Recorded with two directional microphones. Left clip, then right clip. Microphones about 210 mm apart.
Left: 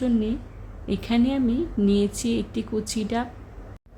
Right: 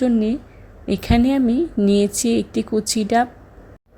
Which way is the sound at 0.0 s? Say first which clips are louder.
Right 6 dB; 30° right (ahead or behind).